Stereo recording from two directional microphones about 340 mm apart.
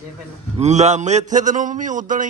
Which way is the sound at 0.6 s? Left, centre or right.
Centre.